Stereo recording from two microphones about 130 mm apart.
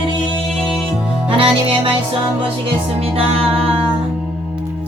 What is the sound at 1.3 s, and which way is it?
Music, 45° right (ahead or behind).